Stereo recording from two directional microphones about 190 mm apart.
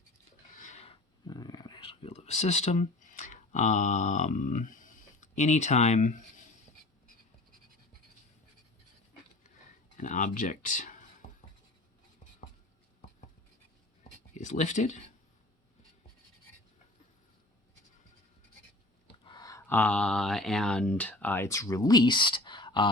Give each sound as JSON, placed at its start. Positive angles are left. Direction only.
{"t": 0.5, "sound": "a sound", "side_deg": 40}
{"t": 1.3, "sound": "speech", "side_deg": 20}
{"t": 10.0, "sound": "speech", "side_deg": 40}
{"t": 14.3, "sound": "speech", "side_deg": 40}
{"t": 19.2, "sound": "speech", "side_deg": 20}